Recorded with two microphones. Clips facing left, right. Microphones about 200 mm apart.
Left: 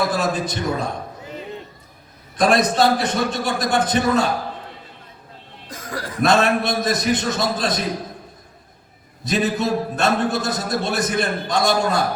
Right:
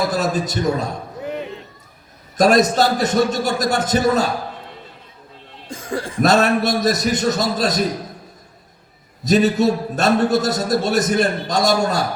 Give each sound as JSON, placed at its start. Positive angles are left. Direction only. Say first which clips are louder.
{"t": 0.1, "sound": "a man's voice", "louder": "right 2 dB", "side_deg": -40}
{"t": 1.2, "sound": "a sound", "louder": "right 8 dB", "side_deg": -65}
{"t": 2.4, "sound": "a man's voice", "louder": "right 2 dB", "side_deg": -40}
{"t": 5.6, "sound": "cough", "louder": "right 5 dB", "side_deg": -25}
{"t": 6.2, "sound": "a man's voice", "louder": "right 2 dB", "side_deg": -40}
{"t": 9.2, "sound": "a man's voice", "louder": "right 6 dB", "side_deg": -40}